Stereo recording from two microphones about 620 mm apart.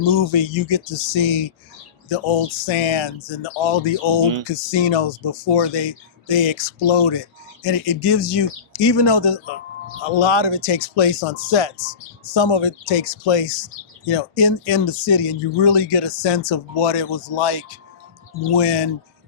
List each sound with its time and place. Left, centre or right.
0.0 s speech: left